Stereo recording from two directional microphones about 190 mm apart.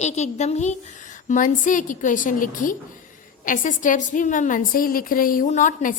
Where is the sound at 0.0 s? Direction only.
35° left (ahead or behind).